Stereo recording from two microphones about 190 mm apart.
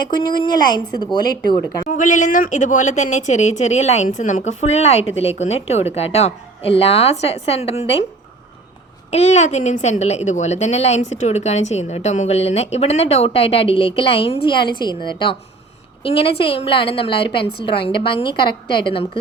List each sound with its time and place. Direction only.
0.0 s a woman's voice: 25° left (ahead or behind)
1.9 s a woman's voice: 40° left (ahead or behind)
9.0 s a woman's voice: 35° left (ahead or behind)